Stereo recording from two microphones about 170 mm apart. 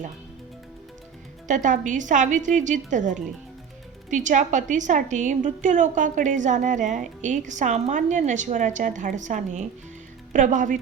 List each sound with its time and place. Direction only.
1.5 s a woman's voice: 50° right (ahead or behind)